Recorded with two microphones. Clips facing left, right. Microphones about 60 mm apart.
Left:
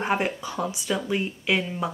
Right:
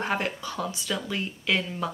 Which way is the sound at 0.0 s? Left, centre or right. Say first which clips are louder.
Left 3 dB; centre.